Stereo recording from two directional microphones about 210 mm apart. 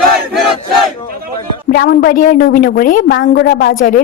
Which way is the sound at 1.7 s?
45° left (ahead or behind).